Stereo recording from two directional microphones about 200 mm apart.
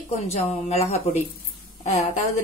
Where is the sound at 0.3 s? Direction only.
35° left (ahead or behind).